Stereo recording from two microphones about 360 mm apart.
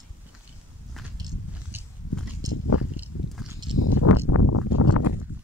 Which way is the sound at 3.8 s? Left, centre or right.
Left.